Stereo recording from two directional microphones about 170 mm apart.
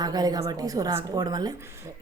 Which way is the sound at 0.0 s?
25° right (ahead or behind).